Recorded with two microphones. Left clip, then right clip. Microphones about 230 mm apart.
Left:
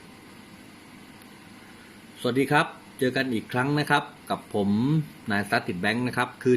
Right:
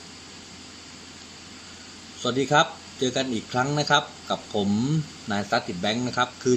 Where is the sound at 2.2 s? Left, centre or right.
Centre.